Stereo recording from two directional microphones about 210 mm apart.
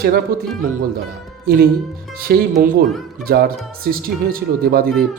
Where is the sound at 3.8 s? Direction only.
45° right (ahead or behind).